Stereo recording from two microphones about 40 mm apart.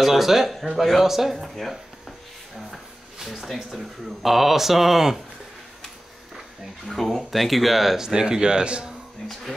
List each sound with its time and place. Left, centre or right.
0.0 s speech: centre
6.9 s speech: centre
8.0 s speech: centre